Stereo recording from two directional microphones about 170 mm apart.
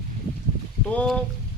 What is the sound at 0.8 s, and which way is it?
Speech, 5° left (ahead or behind).